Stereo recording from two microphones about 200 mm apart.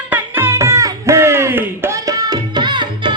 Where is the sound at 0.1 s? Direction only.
10° right (ahead or behind).